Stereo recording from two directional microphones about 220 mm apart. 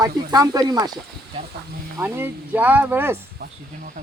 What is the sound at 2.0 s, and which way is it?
Speech, 10° right (ahead or behind).